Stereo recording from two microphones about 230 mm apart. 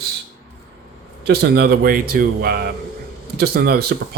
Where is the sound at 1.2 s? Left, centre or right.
Right.